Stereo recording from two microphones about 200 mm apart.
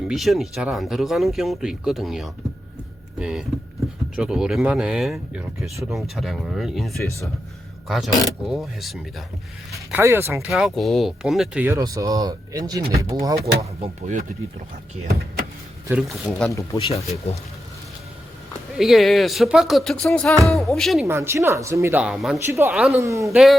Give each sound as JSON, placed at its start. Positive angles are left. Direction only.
{"t": 0.1, "sound": "speech", "side_deg": 0}
{"t": 7.0, "sound": "speech", "side_deg": 15}
{"t": 7.9, "sound": "speech", "side_deg": 0}
{"t": 9.7, "sound": "speech", "side_deg": -10}
{"t": 10.5, "sound": "speech", "side_deg": 0}
{"t": 13.6, "sound": "speech", "side_deg": -30}
{"t": 15.9, "sound": "speech", "side_deg": -5}
{"t": 16.7, "sound": "speech", "side_deg": 30}
{"t": 18.7, "sound": "speech", "side_deg": 0}
{"t": 21.1, "sound": "speech", "side_deg": -15}
{"t": 23.3, "sound": "speech", "side_deg": 0}